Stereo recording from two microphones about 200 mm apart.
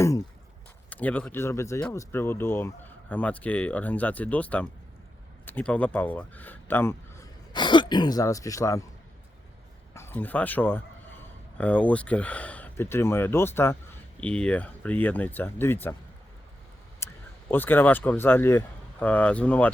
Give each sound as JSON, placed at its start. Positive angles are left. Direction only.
{"t": 0.9, "sound": "speech", "side_deg": 10}
{"t": 7.5, "sound": "speech", "side_deg": 25}
{"t": 9.9, "sound": "speech", "side_deg": 10}
{"t": 17.0, "sound": "a sound", "side_deg": 15}
{"t": 17.5, "sound": "speech", "side_deg": 10}